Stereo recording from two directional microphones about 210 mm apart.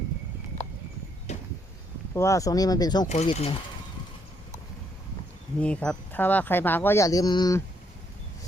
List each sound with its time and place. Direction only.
1.3 s a sound: 30° left (ahead or behind)
2.1 s speech: 15° left (ahead or behind)
3.1 s speech: 30° left (ahead or behind)
5.5 s speech: 5° left (ahead or behind)